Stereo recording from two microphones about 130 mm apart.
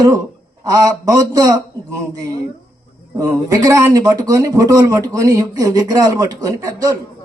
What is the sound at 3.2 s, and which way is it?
Speech, 25° right (ahead or behind).